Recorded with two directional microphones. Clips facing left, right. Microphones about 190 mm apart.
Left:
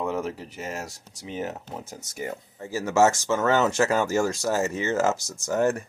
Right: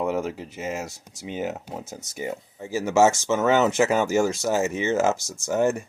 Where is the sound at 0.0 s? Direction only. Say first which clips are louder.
Right 3 dB; 15° right (ahead or behind).